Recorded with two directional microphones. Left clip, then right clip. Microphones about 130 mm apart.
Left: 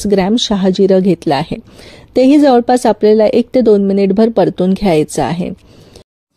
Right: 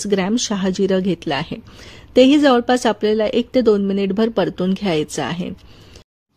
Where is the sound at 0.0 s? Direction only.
30° left (ahead or behind).